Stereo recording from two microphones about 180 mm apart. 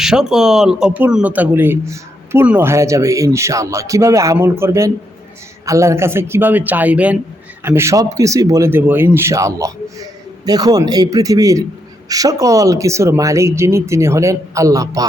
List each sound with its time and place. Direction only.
0.0 s a man's voice: 5° right (ahead or behind); by 15.0 s 20° right (ahead or behind)